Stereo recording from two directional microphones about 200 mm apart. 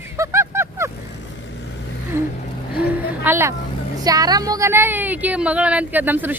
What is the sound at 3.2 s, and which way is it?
Speech, 10° right (ahead or behind).